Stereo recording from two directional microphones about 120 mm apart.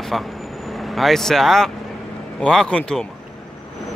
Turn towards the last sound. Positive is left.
turn(degrees=5)  # may be behind; listen again after turning